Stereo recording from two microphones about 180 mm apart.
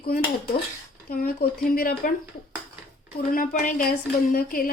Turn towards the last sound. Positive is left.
turn(degrees=50)  # may be behind; listen again after turning